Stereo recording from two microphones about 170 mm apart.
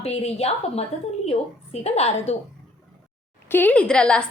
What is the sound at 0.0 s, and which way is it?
A woman's voice, 35° left (ahead or behind).